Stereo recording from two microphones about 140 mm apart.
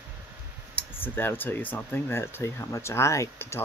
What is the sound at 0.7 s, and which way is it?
Speech, 15° left (ahead or behind).